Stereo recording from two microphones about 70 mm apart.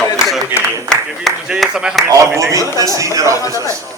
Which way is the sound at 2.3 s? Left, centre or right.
Right.